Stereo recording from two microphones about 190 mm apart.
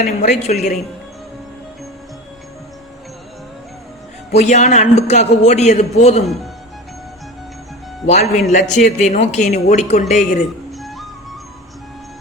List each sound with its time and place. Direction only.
0.0 s speech: 35° left (ahead or behind)
4.4 s speech: 40° left (ahead or behind)
8.0 s speech: 40° left (ahead or behind)
10.7 s music: centre (ahead or behind)